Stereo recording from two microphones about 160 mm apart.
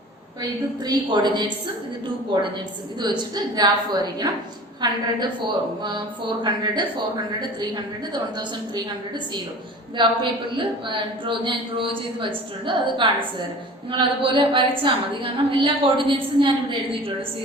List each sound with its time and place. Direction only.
0.9 s a woman's voice: 25° right (ahead or behind)
8.1 s a woman's voice: 25° right (ahead or behind)
10.8 s a woman's voice: 30° right (ahead or behind)